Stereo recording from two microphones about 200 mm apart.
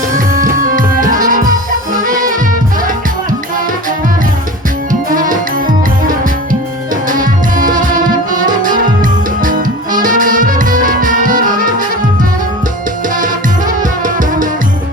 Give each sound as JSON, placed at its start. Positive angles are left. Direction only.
{"t": 0.3, "sound": "music", "side_deg": -45}
{"t": 4.9, "sound": "tabla", "side_deg": -45}
{"t": 7.1, "sound": "music", "side_deg": -40}
{"t": 13.1, "sound": "music", "side_deg": -40}